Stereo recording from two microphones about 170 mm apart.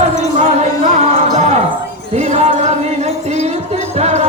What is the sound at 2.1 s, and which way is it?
Speech, 40° right (ahead or behind).